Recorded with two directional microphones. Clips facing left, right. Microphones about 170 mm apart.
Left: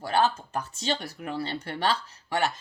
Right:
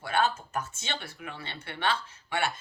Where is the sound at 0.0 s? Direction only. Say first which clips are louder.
Left 3 dB; 35° left (ahead or behind).